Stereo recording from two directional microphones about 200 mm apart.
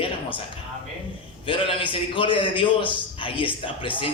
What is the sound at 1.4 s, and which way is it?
A man's voice, 25° left (ahead or behind).